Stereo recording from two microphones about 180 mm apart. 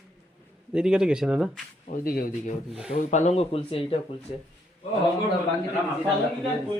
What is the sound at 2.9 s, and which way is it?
Speech, 40° left (ahead or behind).